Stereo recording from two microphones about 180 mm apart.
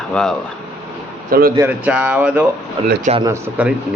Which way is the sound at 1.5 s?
10° right (ahead or behind).